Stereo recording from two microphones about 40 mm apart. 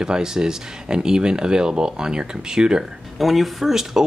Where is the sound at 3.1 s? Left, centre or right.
Centre.